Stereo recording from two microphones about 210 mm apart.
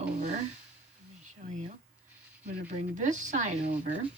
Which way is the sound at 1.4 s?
35° right (ahead or behind).